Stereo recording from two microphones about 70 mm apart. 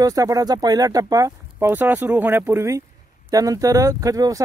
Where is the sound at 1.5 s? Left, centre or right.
Right.